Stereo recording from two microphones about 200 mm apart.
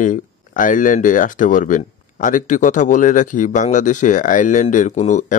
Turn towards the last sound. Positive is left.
turn(degrees=35)  # may be behind; listen again after turning